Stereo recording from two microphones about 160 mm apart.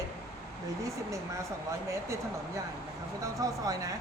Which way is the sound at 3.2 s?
20° right (ahead or behind).